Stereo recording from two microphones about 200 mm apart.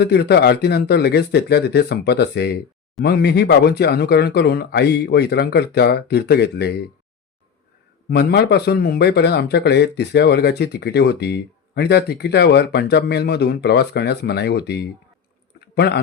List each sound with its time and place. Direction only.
0.0 s speech: 55° left (ahead or behind)
8.1 s speech: 55° left (ahead or behind)